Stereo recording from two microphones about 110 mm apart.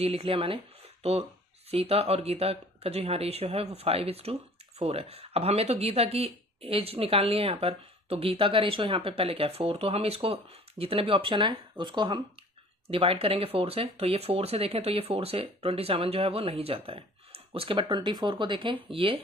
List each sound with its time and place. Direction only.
0.0 s speech: 60° right (ahead or behind)
1.0 s speech: 75° right (ahead or behind); by 12.2 s 45° right (ahead or behind)
12.9 s speech: 60° right (ahead or behind)